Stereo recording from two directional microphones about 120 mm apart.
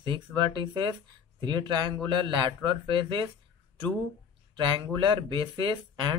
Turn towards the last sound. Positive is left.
turn(degrees=-40)  # may be behind; listen again after turning